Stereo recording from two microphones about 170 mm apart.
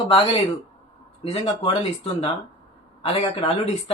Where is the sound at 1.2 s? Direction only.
35° left (ahead or behind).